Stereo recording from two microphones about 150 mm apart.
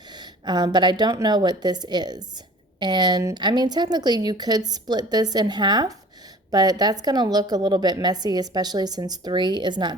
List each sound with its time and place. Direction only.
0.2 s a woman's voice: 30° right (ahead or behind)